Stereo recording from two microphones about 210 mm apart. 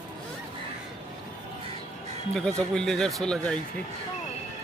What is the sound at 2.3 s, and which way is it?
Speech, 5° left (ahead or behind).